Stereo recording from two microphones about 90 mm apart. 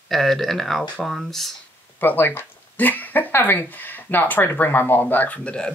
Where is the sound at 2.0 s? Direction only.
20° left (ahead or behind).